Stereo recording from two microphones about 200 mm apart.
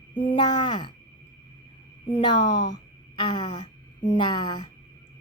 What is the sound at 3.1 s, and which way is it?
A woman's voice, 20° left (ahead or behind).